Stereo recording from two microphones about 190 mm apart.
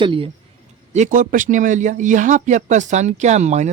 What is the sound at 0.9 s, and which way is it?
A man's voice, 40° right (ahead or behind).